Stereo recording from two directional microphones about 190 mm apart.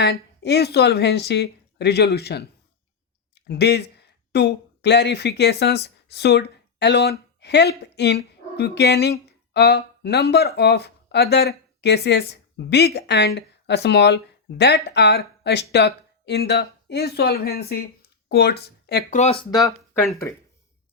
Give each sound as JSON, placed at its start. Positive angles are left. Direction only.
{"t": 0.0, "sound": "speech", "side_deg": 60}
{"t": 19.1, "sound": "speech", "side_deg": 35}